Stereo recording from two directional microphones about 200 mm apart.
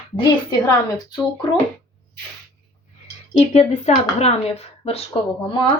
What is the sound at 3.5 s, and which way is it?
Speech, 35° left (ahead or behind).